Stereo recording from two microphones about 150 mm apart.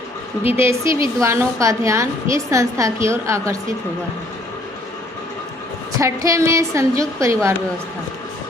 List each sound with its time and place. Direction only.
0.5 s a woman's voice: 20° right (ahead or behind)
6.0 s a woman's voice: 20° right (ahead or behind)